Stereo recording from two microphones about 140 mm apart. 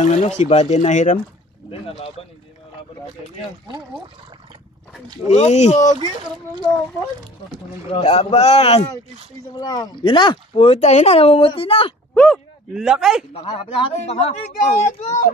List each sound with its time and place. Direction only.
0.0 s speech: 55° left (ahead or behind)
1.7 s speech: 45° left (ahead or behind)
5.3 s speech: 55° left (ahead or behind)
7.8 s speech: 45° left (ahead or behind)
9.6 s speech: 30° left (ahead or behind)
12.1 s a sound: 10° left (ahead or behind)
12.7 s speech: 5° right (ahead or behind)
13.3 s speech: 40° left (ahead or behind)
13.9 s speech: 50° left (ahead or behind)